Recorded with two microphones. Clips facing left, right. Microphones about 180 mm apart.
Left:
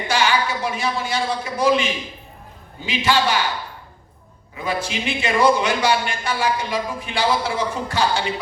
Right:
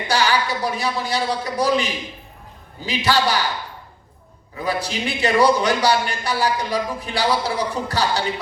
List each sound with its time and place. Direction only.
0.1 s a man's voice: 35° right (ahead or behind)
4.5 s a man's voice: 35° right (ahead or behind)